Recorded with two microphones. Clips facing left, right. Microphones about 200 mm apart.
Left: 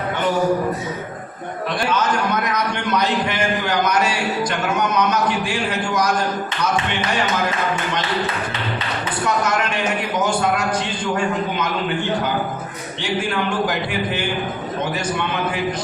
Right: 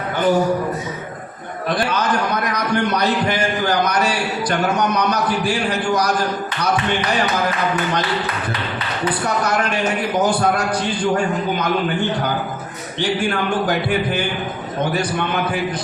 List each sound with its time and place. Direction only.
1.9 s a man's voice: 35° right (ahead or behind)